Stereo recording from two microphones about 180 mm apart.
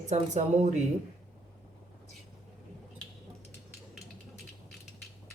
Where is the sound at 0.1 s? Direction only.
40° right (ahead or behind).